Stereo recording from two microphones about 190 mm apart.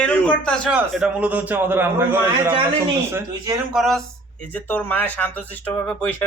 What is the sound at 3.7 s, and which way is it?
Speech, centre (ahead or behind).